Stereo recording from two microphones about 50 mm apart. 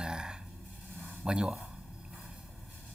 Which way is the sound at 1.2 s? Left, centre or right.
Centre.